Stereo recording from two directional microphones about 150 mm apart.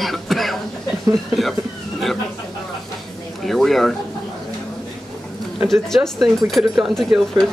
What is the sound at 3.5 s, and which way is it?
Speech, centre (ahead or behind).